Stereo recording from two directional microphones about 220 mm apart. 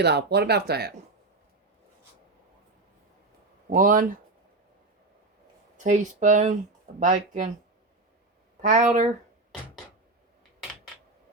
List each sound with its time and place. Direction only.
0.0 s speech: 50° right (ahead or behind)
3.7 s speech: 40° right (ahead or behind)
5.7 s speech: 35° right (ahead or behind)
8.6 s speech: 35° right (ahead or behind)